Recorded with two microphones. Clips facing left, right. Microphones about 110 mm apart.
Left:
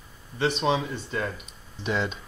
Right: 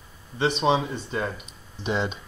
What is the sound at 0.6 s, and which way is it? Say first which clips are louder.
Speech: right 3 dB; 20° right (ahead or behind).